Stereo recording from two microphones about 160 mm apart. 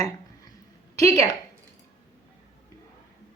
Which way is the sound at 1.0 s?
40° right (ahead or behind).